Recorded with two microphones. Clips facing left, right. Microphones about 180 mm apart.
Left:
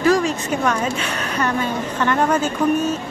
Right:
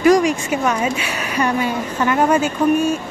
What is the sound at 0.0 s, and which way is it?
A woman's voice, 15° right (ahead or behind).